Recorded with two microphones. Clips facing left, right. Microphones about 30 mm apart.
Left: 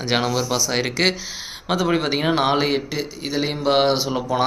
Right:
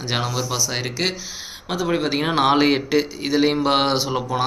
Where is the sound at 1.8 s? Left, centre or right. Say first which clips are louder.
Even; centre.